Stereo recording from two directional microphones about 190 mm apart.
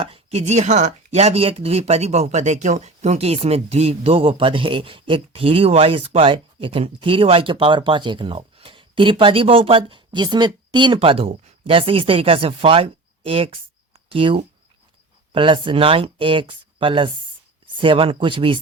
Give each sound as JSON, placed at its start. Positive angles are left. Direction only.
{"t": 0.0, "sound": "speech", "side_deg": -30}